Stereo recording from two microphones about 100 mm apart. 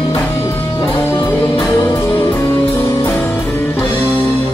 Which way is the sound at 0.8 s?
20° left (ahead or behind).